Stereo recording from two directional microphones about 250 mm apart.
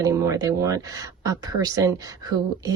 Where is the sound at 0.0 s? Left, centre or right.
Centre.